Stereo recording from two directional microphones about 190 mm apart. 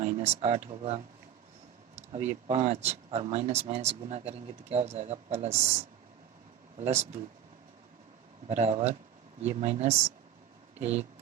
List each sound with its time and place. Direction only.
0.0 s speech: 35° right (ahead or behind)
2.5 s speech: 35° right (ahead or behind)
8.4 s speech: 35° right (ahead or behind)